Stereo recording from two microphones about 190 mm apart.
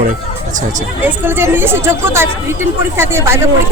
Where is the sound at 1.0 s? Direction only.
10° right (ahead or behind).